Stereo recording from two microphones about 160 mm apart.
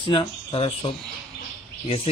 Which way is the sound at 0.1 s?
35° left (ahead or behind).